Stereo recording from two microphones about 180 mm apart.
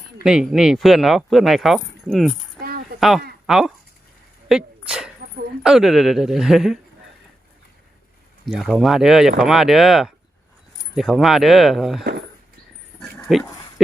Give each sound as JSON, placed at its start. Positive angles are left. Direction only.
{"t": 0.3, "sound": "speech", "side_deg": -5}
{"t": 2.6, "sound": "a sound", "side_deg": -55}
{"t": 3.0, "sound": "speech", "side_deg": 0}
{"t": 4.4, "sound": "dog", "side_deg": -5}
{"t": 5.6, "sound": "speech", "side_deg": 0}
{"t": 8.4, "sound": "speech", "side_deg": 0}
{"t": 13.0, "sound": "dog", "side_deg": 0}